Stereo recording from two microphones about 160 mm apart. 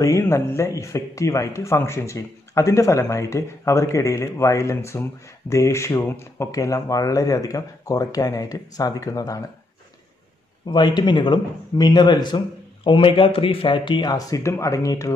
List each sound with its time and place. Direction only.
0.0 s speech: 20° left (ahead or behind)
10.7 s speech: 30° left (ahead or behind)